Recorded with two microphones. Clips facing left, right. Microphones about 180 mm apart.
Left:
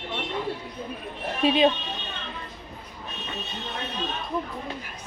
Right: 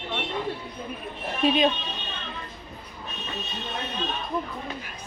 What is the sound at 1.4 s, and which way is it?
Speech, 25° left (ahead or behind).